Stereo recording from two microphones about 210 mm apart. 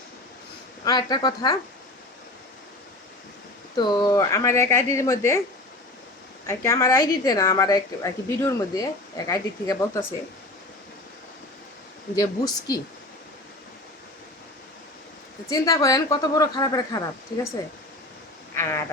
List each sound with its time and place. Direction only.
0.9 s a woman's voice: 20° left (ahead or behind)
3.8 s a woman's voice: 20° left (ahead or behind)
6.5 s a woman's voice: 15° left (ahead or behind)
12.1 s a woman's voice: 15° left (ahead or behind)
15.4 s a woman's voice: 15° left (ahead or behind)
18.5 s speech: 10° left (ahead or behind)